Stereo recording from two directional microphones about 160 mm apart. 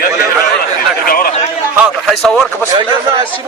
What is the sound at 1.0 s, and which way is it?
Chatter, 65° left (ahead or behind).